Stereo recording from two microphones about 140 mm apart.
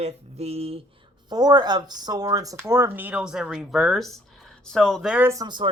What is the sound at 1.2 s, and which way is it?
Speech, 30° right (ahead or behind).